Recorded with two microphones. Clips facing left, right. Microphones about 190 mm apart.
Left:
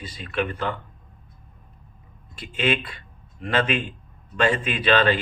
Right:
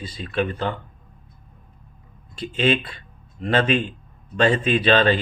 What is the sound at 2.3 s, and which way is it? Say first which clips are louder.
Speech: right 4 dB; 35° right (ahead or behind).